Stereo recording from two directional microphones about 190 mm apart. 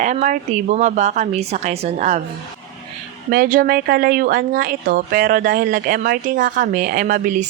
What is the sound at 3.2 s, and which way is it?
A woman's voice, 50° right (ahead or behind).